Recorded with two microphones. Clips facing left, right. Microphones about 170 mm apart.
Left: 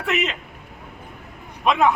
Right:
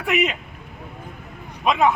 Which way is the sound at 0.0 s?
10° right (ahead or behind).